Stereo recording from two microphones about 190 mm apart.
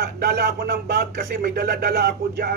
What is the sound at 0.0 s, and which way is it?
Speech, 55° right (ahead or behind).